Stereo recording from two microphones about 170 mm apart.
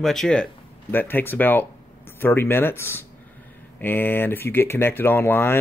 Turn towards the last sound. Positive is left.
turn(degrees=15)  # may be behind; listen again after turning